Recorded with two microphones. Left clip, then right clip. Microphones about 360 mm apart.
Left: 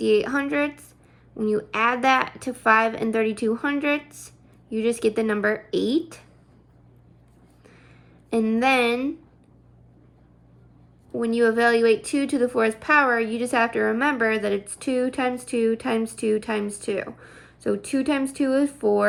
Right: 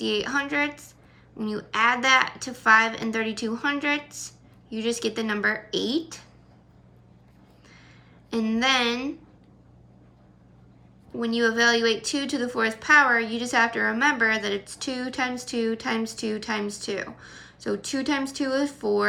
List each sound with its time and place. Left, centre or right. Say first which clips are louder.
0.0 s a woman's voice: left 5 dB; centre
8.3 s a woman's voice: left 3 dB; centre
11.2 s a woman's voice: left 2 dB; centre